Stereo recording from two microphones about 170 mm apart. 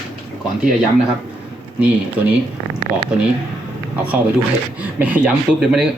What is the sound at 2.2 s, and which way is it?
Speech, 10° right (ahead or behind).